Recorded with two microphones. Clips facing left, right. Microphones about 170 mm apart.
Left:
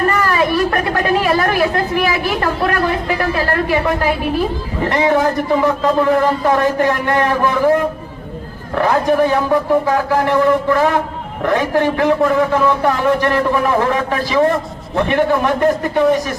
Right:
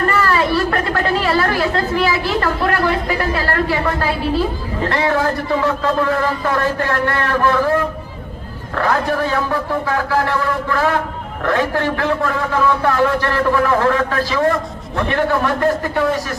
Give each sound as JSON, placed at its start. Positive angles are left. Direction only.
{"t": 0.1, "sound": "chatter", "side_deg": 15}
{"t": 3.3, "sound": "a man's voice", "side_deg": 15}